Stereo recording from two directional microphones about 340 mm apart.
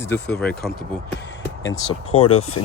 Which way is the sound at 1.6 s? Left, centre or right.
Left.